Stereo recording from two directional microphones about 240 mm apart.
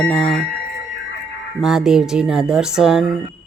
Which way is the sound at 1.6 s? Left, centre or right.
Centre.